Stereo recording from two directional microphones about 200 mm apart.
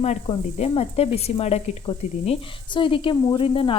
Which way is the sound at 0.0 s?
30° left (ahead or behind).